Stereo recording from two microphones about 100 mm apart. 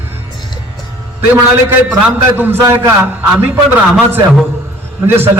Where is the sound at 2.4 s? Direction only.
25° right (ahead or behind).